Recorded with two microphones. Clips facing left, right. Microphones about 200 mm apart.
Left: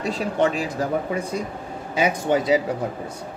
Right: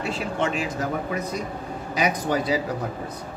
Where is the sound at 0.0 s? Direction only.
35° left (ahead or behind).